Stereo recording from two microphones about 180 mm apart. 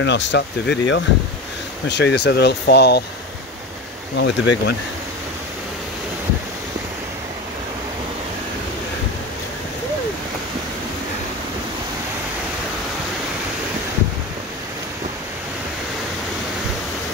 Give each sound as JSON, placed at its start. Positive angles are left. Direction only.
{"t": 0.0, "sound": "speech", "side_deg": 80}
{"t": 4.2, "sound": "speech", "side_deg": 75}